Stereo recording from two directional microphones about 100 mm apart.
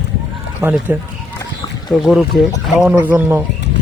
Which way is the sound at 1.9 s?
Centre (ahead or behind).